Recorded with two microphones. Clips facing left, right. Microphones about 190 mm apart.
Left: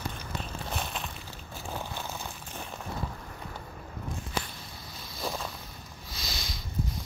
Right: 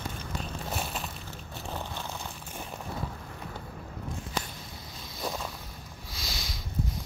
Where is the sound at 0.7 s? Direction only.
5° right (ahead or behind).